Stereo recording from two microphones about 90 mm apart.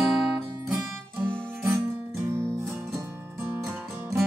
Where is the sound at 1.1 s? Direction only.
25° right (ahead or behind).